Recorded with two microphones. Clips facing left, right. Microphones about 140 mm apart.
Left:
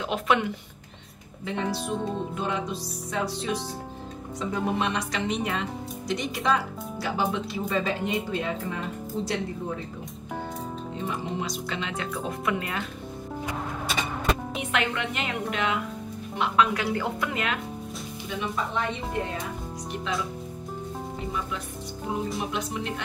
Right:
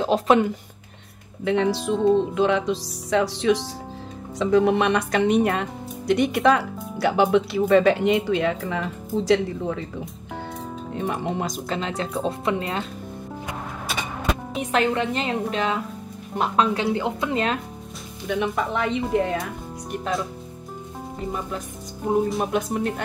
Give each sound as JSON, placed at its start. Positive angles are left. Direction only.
{"t": 0.0, "sound": "speech", "side_deg": -35}
{"t": 1.4, "sound": "speech", "side_deg": -75}
{"t": 1.9, "sound": "speech", "side_deg": -90}
{"t": 11.0, "sound": "speech", "side_deg": -55}
{"t": 11.7, "sound": "a woman's voice", "side_deg": -35}
{"t": 14.6, "sound": "a woman's voice", "side_deg": -35}
{"t": 18.3, "sound": "speech", "side_deg": -65}
{"t": 21.3, "sound": "speech", "side_deg": -40}